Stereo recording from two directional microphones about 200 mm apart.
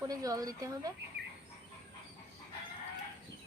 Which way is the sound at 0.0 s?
20° right (ahead or behind).